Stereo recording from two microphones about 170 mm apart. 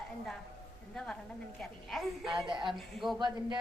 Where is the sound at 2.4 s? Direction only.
30° right (ahead or behind).